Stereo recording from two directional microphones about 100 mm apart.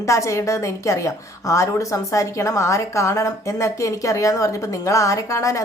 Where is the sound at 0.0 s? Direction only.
30° left (ahead or behind).